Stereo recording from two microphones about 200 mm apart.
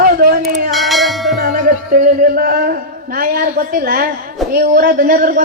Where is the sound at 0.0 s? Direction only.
50° right (ahead or behind).